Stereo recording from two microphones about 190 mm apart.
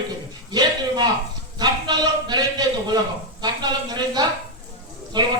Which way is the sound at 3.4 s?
20° right (ahead or behind).